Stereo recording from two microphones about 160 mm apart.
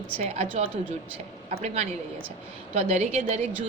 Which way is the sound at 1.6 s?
45° right (ahead or behind).